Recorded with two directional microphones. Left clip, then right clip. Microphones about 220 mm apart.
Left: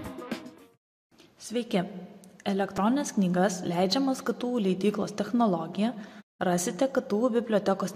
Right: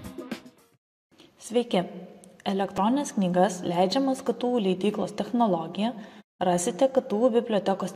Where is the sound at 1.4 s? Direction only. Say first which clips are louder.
Right 5 dB; 5° left (ahead or behind).